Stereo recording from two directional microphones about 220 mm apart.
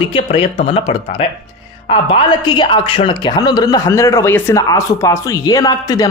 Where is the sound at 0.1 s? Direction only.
25° left (ahead or behind).